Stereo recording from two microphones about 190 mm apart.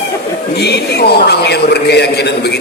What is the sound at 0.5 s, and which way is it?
A man's voice, 60° left (ahead or behind).